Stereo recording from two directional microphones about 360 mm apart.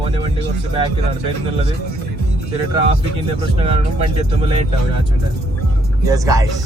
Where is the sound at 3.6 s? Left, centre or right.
Centre.